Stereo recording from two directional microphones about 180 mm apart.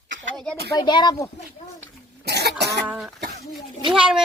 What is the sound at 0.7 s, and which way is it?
Speech, 25° left (ahead or behind).